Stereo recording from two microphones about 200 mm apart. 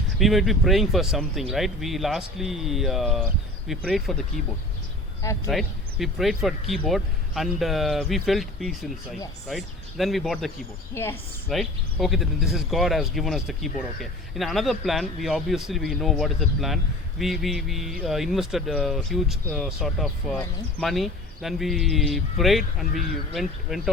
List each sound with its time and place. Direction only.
0.2 s speech: centre (ahead or behind)
5.5 s speech: centre (ahead or behind)
10.9 s a woman's voice: 10° left (ahead or behind)
11.4 s speech: centre (ahead or behind)